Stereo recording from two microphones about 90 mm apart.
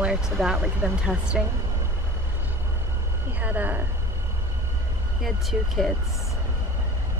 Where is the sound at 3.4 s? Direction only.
20° right (ahead or behind).